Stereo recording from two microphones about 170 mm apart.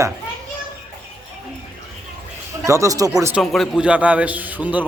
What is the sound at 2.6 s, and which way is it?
Speech, 20° right (ahead or behind).